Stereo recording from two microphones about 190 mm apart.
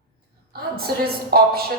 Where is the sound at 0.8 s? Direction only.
55° right (ahead or behind).